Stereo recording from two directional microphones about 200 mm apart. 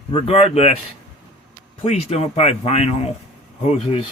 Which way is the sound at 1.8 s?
35° left (ahead or behind).